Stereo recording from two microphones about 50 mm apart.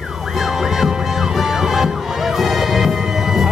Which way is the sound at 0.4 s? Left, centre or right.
Centre.